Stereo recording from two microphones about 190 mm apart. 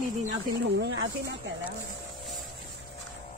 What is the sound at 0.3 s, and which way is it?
Speech, 65° right (ahead or behind).